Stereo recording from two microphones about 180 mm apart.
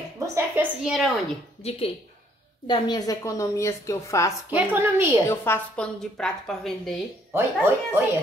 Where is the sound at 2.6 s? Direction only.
25° left (ahead or behind).